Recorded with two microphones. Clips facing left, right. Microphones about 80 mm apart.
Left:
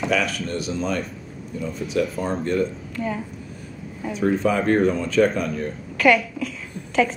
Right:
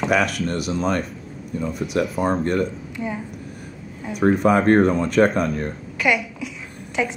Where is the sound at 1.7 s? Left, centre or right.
Right.